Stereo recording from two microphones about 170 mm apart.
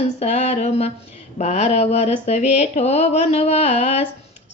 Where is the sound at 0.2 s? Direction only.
40° left (ahead or behind).